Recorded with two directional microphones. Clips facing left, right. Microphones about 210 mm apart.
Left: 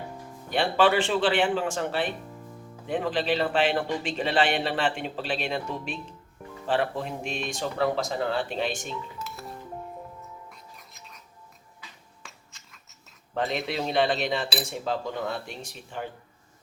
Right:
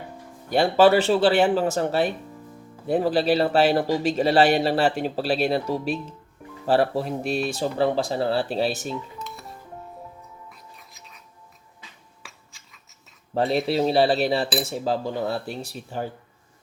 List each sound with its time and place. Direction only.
0.5 s a man's voice: 40° right (ahead or behind)
8.9 s music: centre (ahead or behind)
13.3 s a man's voice: 35° right (ahead or behind)